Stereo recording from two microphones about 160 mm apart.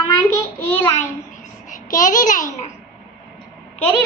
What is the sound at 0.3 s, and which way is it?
Child singing, 15° left (ahead or behind).